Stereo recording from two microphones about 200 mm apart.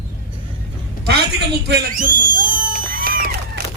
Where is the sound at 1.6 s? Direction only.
45° right (ahead or behind).